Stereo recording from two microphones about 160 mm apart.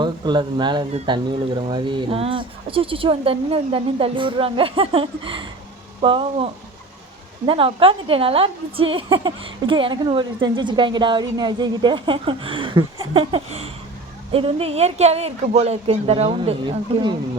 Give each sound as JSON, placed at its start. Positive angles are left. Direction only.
{"t": 0.0, "sound": "a woman's voice", "side_deg": -30}